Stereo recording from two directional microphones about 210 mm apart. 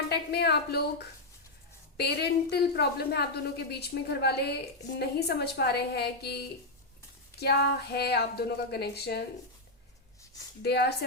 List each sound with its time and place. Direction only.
0.1 s a woman's voice: 50° left (ahead or behind)
2.0 s a woman's voice: 50° left (ahead or behind)
7.3 s a woman's voice: 50° left (ahead or behind)
10.6 s a woman's voice: 50° left (ahead or behind)